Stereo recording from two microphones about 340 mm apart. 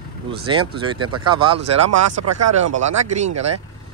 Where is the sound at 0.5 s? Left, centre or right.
Centre.